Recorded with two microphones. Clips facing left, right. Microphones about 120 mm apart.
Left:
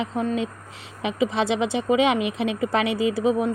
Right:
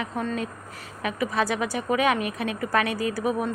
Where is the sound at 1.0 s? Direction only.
25° left (ahead or behind).